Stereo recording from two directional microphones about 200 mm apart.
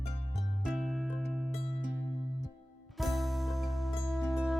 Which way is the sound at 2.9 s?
Centre (ahead or behind).